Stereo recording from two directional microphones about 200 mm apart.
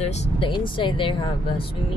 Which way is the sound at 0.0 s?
35° left (ahead or behind).